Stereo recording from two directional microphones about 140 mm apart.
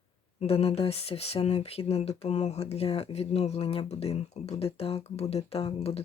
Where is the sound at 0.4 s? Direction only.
45° left (ahead or behind).